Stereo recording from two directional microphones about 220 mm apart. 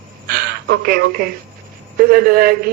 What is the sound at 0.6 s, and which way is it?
Speech, 45° right (ahead or behind).